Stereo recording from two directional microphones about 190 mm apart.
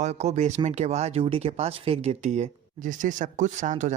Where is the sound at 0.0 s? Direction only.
35° right (ahead or behind).